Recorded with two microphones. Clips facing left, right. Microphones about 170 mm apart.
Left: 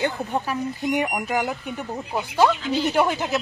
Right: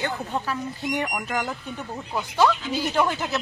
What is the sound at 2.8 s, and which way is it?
Speech, 10° left (ahead or behind).